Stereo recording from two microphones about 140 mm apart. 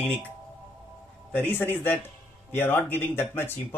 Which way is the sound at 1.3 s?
10° left (ahead or behind).